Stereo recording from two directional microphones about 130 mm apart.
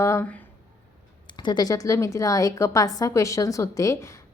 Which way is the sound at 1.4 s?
30° left (ahead or behind).